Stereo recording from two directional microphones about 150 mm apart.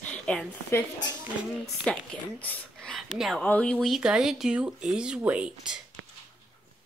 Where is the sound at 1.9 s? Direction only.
5° left (ahead or behind).